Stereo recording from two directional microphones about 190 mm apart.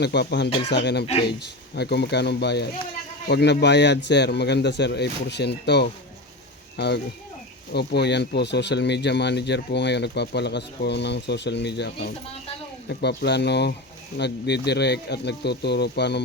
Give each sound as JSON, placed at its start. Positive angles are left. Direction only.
{"t": 0.0, "sound": "speech", "side_deg": 60}